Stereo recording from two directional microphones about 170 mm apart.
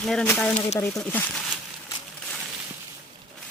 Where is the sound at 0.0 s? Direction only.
5° left (ahead or behind).